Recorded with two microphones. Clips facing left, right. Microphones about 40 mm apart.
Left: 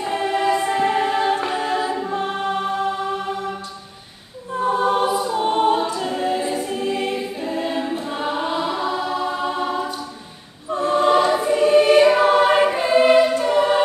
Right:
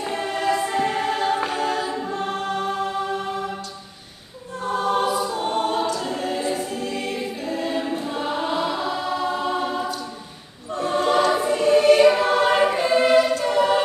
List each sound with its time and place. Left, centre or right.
0.1 s choir: centre
4.6 s choir: centre
10.7 s choir: left
11.0 s choir: centre